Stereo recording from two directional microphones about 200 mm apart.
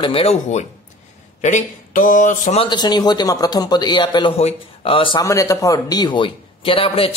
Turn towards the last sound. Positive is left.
turn(degrees=30)  # may be behind; listen again after turning